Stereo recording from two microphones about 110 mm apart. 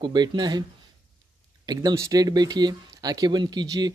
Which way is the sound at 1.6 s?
35° right (ahead or behind).